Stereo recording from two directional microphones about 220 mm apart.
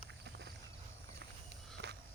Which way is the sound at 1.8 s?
50° right (ahead or behind).